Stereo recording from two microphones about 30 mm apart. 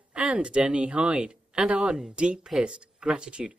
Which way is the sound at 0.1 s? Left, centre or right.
Right.